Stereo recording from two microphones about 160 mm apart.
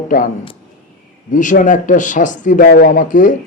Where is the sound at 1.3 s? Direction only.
55° left (ahead or behind).